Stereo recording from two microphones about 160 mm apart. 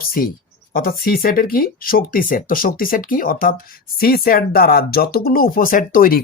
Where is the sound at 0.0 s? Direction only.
65° left (ahead or behind).